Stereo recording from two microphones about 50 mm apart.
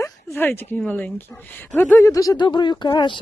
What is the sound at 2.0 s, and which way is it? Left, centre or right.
Speech, left.